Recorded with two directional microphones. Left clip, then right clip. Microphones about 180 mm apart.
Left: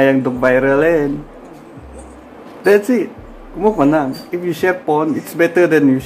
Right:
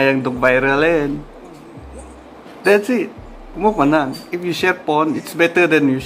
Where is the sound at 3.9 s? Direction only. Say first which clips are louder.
Left 1 dB; 15° right (ahead or behind).